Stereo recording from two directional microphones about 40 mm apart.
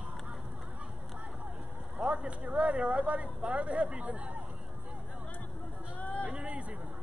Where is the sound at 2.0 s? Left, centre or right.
Right.